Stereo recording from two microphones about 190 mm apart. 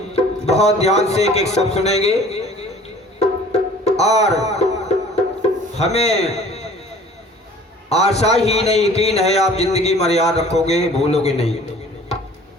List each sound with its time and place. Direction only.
0.1 s speech: 35° left (ahead or behind)
3.2 s music: 35° left (ahead or behind)
5.7 s a man's voice: 35° left (ahead or behind)
7.9 s a man's voice: 35° left (ahead or behind)